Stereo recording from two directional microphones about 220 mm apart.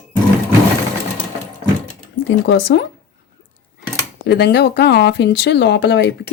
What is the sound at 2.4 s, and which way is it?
Speech, 60° left (ahead or behind).